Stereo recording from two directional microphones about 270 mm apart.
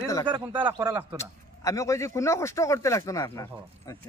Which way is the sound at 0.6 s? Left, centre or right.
Centre.